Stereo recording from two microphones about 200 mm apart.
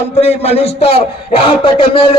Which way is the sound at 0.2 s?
30° left (ahead or behind).